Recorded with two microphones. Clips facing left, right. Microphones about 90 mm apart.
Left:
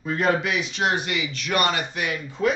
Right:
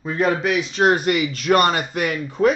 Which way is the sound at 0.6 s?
40° right (ahead or behind).